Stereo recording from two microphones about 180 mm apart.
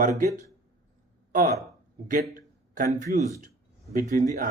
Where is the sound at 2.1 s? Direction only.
50° right (ahead or behind).